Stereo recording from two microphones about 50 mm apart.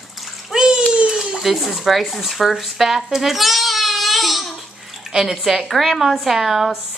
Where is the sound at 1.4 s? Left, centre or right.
Centre.